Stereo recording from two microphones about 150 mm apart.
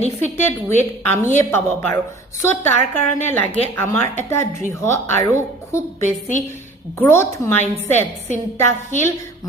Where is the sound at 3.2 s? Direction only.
15° left (ahead or behind).